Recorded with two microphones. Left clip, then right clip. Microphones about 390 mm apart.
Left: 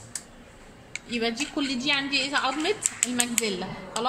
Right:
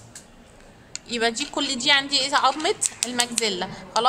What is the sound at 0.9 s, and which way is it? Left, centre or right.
A woman's voice, centre.